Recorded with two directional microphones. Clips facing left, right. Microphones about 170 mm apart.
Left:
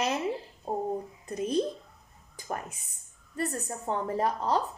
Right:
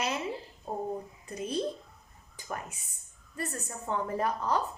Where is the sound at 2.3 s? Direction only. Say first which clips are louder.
Left 3 dB; 35° left (ahead or behind).